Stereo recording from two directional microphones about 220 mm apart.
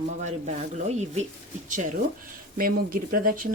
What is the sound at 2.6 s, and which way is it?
Speech, 40° right (ahead or behind).